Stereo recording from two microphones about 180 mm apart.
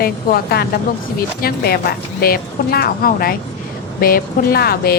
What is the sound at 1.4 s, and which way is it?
Speech, 60° left (ahead or behind).